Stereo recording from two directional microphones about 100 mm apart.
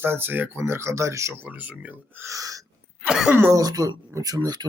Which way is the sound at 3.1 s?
5° right (ahead or behind).